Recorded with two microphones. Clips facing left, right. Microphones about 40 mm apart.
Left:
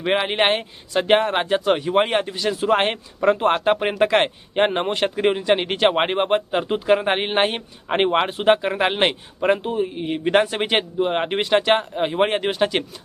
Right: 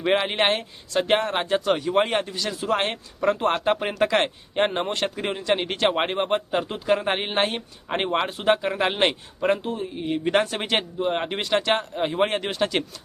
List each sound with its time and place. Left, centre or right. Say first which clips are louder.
0.0 s speech: left 2 dB; centre
2.6 s speech: left 5 dB; left; by 12.8 s centre